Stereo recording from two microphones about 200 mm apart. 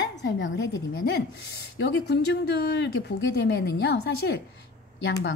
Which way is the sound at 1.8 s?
60° left (ahead or behind).